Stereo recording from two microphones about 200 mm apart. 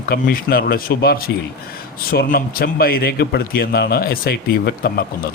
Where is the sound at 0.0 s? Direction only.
45° left (ahead or behind).